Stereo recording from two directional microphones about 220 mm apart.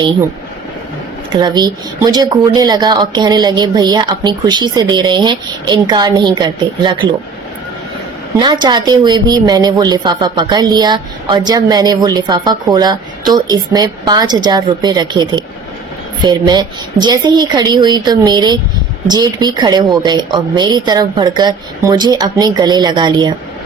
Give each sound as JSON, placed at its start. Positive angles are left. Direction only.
{"t": 1.3, "sound": "speech", "side_deg": -20}
{"t": 8.4, "sound": "speech", "side_deg": -20}